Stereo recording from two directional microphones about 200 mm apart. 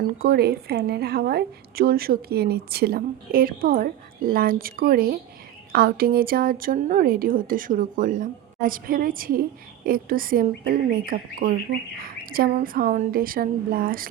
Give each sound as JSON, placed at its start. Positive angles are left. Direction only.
{"t": 0.2, "sound": "a woman's voice", "side_deg": -50}